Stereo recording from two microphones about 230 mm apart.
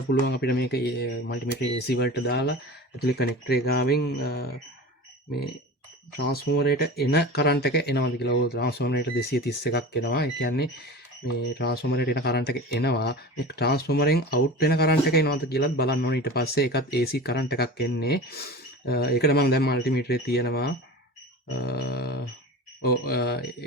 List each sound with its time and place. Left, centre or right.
0.1 s speech: left
6.2 s speech: left